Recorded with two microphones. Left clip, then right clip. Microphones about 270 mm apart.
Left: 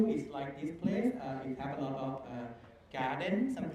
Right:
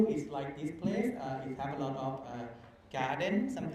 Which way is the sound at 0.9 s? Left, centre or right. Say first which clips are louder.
Even; right.